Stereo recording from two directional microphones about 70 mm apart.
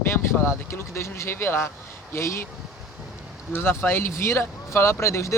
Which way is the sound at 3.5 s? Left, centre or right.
Left.